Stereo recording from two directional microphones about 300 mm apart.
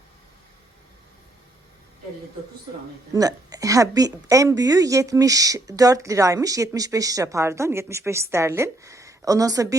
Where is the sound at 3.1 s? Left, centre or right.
Centre.